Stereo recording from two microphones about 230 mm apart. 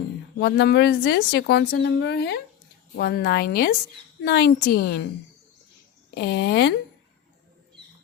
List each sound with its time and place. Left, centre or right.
0.3 s a woman's voice: left
6.1 s a woman's voice: left